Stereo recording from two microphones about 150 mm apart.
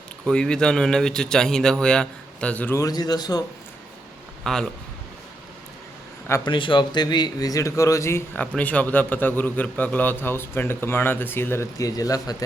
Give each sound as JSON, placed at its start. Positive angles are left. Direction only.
{"t": 0.3, "sound": "speech", "side_deg": 5}
{"t": 2.8, "sound": "speech", "side_deg": 25}
{"t": 4.4, "sound": "speech", "side_deg": 0}
{"t": 6.2, "sound": "a man's voice", "side_deg": 20}
{"t": 6.5, "sound": "speech", "side_deg": 30}